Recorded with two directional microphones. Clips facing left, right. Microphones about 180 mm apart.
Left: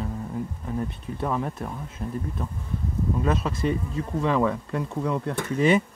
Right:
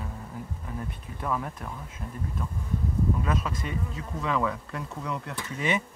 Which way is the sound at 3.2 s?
30° left (ahead or behind).